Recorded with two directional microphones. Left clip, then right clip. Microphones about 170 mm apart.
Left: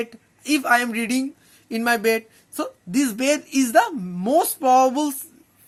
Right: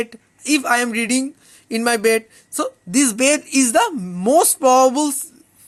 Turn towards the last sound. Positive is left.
turn(degrees=-30)  # may be behind; listen again after turning